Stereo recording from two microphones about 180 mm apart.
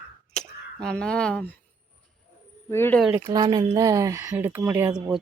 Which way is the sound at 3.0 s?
10° right (ahead or behind).